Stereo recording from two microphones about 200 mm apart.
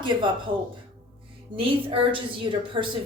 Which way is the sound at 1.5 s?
25° right (ahead or behind).